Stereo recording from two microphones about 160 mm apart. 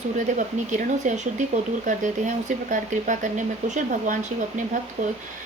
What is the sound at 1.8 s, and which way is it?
Speech, 55° right (ahead or behind).